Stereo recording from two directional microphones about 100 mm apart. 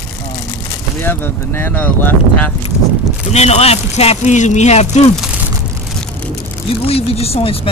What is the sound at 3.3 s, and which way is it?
Speech, 90° left.